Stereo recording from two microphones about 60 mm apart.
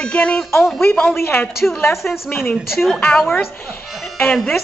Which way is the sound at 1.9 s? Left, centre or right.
Centre.